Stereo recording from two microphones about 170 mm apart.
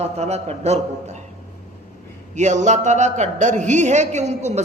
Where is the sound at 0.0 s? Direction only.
40° right (ahead or behind).